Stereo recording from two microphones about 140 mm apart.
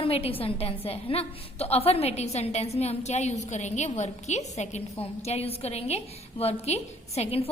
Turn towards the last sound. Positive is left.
turn(degrees=45)  # may be behind; listen again after turning